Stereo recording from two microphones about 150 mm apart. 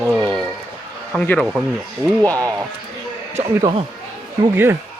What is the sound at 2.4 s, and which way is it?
Speech, 20° right (ahead or behind).